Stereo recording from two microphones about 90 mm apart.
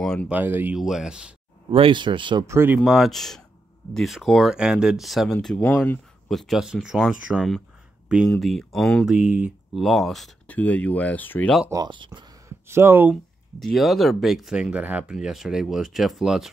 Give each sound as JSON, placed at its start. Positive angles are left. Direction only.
{"t": 0.0, "sound": "a sound", "side_deg": 5}
{"t": 0.3, "sound": "speech", "side_deg": -20}
{"t": 0.7, "sound": "speech", "side_deg": -5}
{"t": 1.7, "sound": "speech", "side_deg": -75}
{"t": 2.4, "sound": "speech", "side_deg": -30}
{"t": 2.8, "sound": "speech", "side_deg": 0}
{"t": 7.3, "sound": "speech", "side_deg": 5}
{"t": 9.0, "sound": "speech", "side_deg": -15}
{"t": 9.8, "sound": "speech", "side_deg": 0}
{"t": 10.4, "sound": "speech", "side_deg": 15}
{"t": 11.9, "sound": "speech", "side_deg": -65}
{"t": 12.4, "sound": "speech", "side_deg": -30}
{"t": 13.1, "sound": "speech", "side_deg": 0}
{"t": 15.1, "sound": "speech", "side_deg": -5}